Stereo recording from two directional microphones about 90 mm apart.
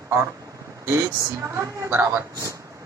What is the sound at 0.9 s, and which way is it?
A woman's voice, 30° right (ahead or behind).